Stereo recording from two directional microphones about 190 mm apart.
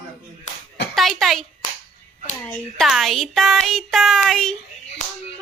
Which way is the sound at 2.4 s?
Centre (ahead or behind).